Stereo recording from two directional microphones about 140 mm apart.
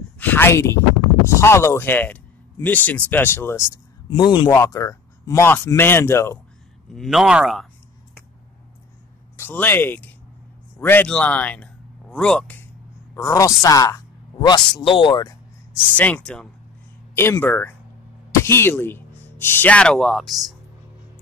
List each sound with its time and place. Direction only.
0.2 s speech: 15° left (ahead or behind)
4.1 s speech: 30° left (ahead or behind)
6.9 s a man's voice: centre (ahead or behind)
9.4 s speech: 15° left (ahead or behind)
13.1 s speech: 20° left (ahead or behind)
16.0 s speech: 10° left (ahead or behind)